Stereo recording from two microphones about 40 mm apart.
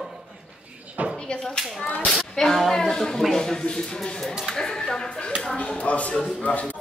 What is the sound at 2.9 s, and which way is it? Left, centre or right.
Speech, centre.